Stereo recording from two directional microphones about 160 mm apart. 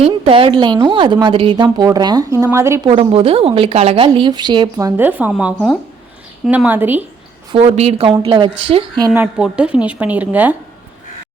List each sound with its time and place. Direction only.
0.0 s a woman's voice: 35° right (ahead or behind); by 2.9 s 15° right (ahead or behind)
2.9 s a woman's voice: 35° right (ahead or behind); by 7.0 s 10° right (ahead or behind)
7.5 s a woman's voice: 40° right (ahead or behind)
9.0 s a woman's voice: 10° right (ahead or behind)